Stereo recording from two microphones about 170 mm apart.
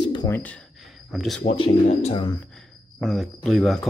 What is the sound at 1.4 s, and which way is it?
Speech, 35° left (ahead or behind).